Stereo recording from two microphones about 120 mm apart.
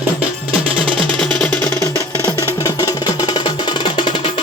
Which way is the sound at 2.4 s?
25° left (ahead or behind).